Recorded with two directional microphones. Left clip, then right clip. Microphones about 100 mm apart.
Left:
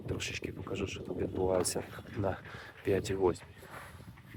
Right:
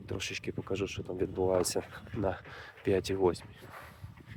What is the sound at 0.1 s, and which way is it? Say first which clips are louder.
Speech: right 1 dB; 35° right (ahead or behind).